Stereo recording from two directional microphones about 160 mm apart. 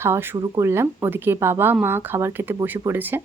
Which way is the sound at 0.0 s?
15° right (ahead or behind).